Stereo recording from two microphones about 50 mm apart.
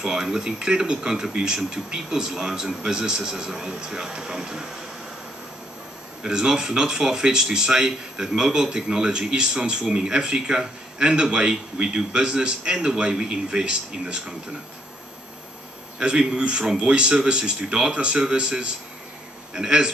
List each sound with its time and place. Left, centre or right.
0.0 s speech: centre
6.2 s speech: centre
16.0 s a man's voice: centre